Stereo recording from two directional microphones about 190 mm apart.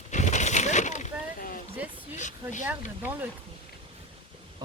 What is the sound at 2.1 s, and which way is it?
Speech, 40° left (ahead or behind).